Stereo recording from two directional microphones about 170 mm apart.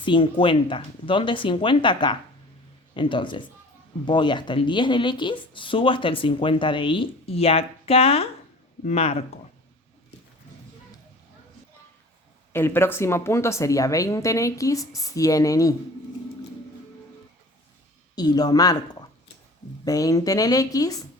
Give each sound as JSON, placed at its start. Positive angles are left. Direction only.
{"t": 0.0, "sound": "speech", "side_deg": 30}
{"t": 12.5, "sound": "speech", "side_deg": 15}
{"t": 18.1, "sound": "speech", "side_deg": 25}